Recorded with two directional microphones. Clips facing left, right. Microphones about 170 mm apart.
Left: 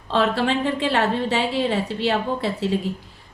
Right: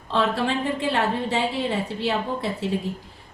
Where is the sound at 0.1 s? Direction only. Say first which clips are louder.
Left 3 dB; 75° left (ahead or behind).